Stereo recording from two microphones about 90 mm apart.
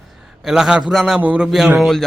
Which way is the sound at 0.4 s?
5° right (ahead or behind).